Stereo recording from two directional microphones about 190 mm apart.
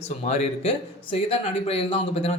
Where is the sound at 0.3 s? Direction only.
35° left (ahead or behind).